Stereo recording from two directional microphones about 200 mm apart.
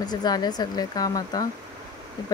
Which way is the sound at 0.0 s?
20° left (ahead or behind).